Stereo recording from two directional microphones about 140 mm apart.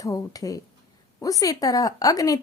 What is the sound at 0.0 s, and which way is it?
Speech, 25° left (ahead or behind).